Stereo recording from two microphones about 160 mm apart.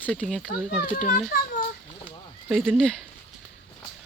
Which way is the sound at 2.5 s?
Centre (ahead or behind).